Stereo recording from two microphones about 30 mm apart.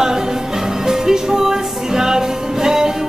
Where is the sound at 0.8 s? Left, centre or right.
Centre.